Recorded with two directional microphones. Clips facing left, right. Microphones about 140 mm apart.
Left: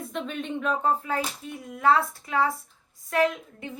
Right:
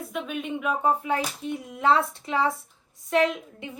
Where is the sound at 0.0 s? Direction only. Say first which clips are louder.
Right 1 dB; 5° right (ahead or behind).